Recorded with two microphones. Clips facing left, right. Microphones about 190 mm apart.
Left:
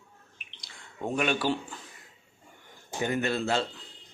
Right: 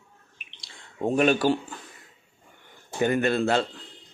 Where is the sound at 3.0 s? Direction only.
55° right (ahead or behind).